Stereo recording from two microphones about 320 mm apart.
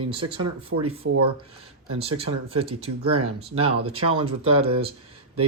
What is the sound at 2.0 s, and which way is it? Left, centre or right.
Speech, centre.